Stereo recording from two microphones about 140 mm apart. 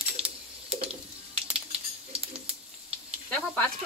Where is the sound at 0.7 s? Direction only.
45° right (ahead or behind).